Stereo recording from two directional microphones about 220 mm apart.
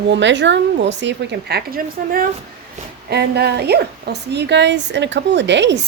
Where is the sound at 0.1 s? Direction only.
55° right (ahead or behind).